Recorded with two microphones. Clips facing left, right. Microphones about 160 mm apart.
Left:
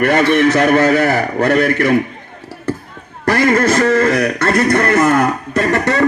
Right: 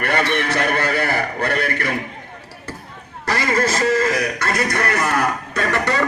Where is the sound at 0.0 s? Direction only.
45° left (ahead or behind).